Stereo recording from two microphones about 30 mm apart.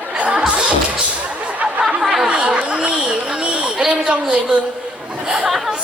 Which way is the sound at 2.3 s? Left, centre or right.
Right.